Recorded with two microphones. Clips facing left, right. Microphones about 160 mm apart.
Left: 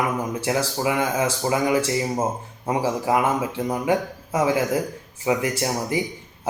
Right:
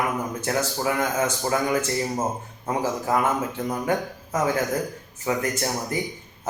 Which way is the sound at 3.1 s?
10° left (ahead or behind).